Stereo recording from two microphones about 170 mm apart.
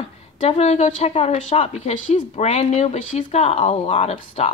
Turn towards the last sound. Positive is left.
turn(degrees=35)  # may be behind; listen again after turning